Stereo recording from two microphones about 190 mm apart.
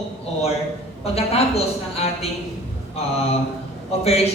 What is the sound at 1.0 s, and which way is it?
A man's voice, 30° left (ahead or behind).